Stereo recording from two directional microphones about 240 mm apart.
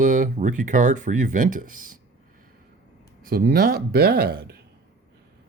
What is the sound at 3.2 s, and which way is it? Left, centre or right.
Speech, right.